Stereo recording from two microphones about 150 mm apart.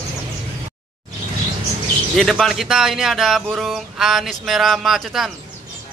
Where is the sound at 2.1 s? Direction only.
Centre (ahead or behind).